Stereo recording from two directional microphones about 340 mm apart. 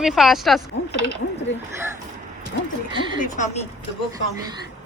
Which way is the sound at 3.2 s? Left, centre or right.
Left.